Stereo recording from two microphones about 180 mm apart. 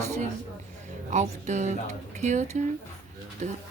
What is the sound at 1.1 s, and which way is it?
A woman's voice, 40° right (ahead or behind).